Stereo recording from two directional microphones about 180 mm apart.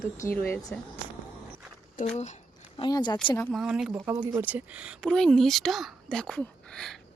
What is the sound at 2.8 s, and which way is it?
Speech, 25° left (ahead or behind).